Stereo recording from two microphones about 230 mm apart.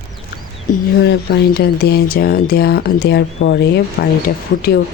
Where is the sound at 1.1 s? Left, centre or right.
Left.